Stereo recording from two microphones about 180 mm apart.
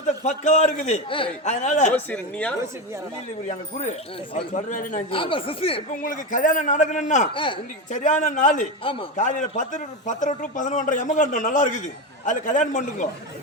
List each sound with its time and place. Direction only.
0.1 s a man's voice: 40° left (ahead or behind)
1.9 s speech: 10° left (ahead or behind)
3.4 s a man's voice: 40° left (ahead or behind)
5.1 s speech: 30° left (ahead or behind)
5.9 s a man's voice: 45° left (ahead or behind)
7.3 s speech: 30° left (ahead or behind)
7.9 s a man's voice: 45° left (ahead or behind)
8.8 s speech: 30° left (ahead or behind)
9.1 s a man's voice: 45° left (ahead or behind)